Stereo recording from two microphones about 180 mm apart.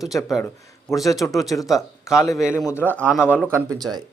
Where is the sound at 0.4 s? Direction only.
15° left (ahead or behind).